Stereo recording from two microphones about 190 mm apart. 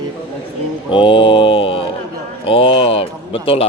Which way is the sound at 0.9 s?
25° left (ahead or behind).